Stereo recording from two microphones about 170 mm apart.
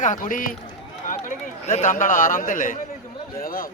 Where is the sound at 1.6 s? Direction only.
45° left (ahead or behind).